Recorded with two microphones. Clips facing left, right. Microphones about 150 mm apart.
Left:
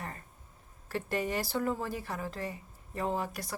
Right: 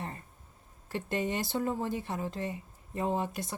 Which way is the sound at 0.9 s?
20° right (ahead or behind).